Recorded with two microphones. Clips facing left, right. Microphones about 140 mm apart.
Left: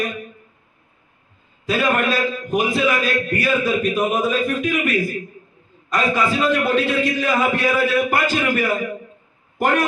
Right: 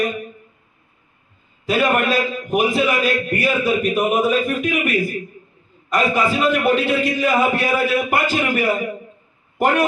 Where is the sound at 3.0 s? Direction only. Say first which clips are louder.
Right 2 dB; 10° right (ahead or behind).